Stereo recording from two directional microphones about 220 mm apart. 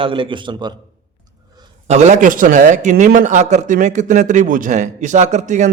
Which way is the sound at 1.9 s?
30° right (ahead or behind).